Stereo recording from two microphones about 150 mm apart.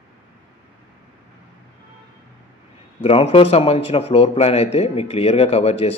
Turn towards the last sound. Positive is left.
turn(degrees=40)  # may be behind; listen again after turning